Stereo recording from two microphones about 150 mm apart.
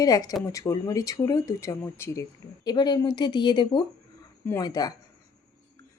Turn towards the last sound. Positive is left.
turn(degrees=25)  # may be behind; listen again after turning